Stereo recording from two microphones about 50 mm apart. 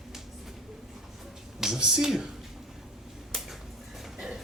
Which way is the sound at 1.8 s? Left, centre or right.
Centre.